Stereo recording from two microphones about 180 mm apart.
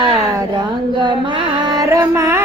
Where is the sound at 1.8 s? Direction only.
15° right (ahead or behind).